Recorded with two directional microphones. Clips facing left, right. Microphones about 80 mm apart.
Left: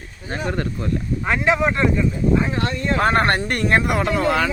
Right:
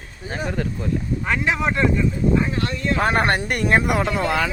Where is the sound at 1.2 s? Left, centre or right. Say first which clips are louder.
Left 4 dB; centre.